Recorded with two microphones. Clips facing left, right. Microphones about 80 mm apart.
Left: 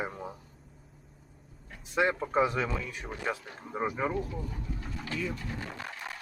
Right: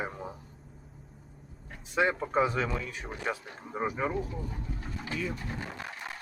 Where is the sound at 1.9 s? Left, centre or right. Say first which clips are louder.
Even; centre.